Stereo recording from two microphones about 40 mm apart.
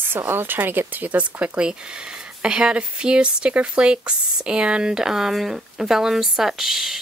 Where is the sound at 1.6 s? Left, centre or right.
Right.